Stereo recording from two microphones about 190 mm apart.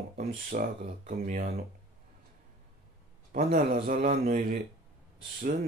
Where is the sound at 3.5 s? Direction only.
50° right (ahead or behind).